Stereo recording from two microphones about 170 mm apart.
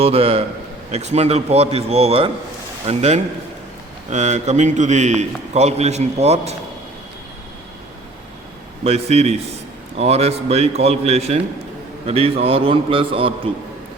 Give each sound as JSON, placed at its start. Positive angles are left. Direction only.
{"t": 0.0, "sound": "a man's voice", "side_deg": -35}
{"t": 8.8, "sound": "a man's voice", "side_deg": -35}